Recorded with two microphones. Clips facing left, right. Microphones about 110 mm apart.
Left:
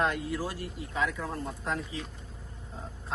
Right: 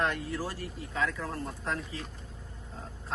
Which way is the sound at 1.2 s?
5° left (ahead or behind).